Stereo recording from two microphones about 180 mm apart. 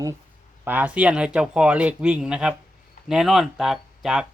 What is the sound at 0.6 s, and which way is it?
Speech, 10° right (ahead or behind).